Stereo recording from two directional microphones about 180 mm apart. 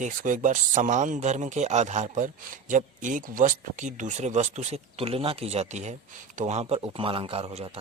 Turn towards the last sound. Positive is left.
turn(degrees=-35)  # may be behind; listen again after turning